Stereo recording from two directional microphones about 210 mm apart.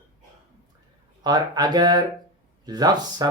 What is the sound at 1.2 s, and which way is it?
Speech, 20° right (ahead or behind).